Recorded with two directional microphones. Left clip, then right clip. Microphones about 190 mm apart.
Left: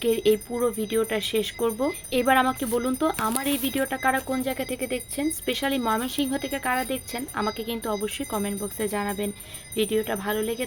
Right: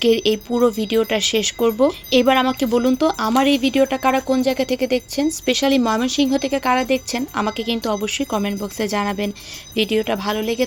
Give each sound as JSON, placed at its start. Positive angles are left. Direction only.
{"t": 0.0, "sound": "speech", "side_deg": -35}